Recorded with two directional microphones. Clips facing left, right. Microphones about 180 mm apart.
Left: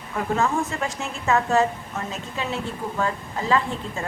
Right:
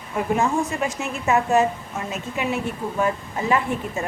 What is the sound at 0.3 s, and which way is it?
A woman's voice, 15° right (ahead or behind).